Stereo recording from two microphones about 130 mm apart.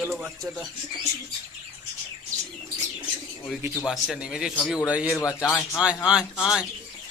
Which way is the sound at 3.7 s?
Centre (ahead or behind).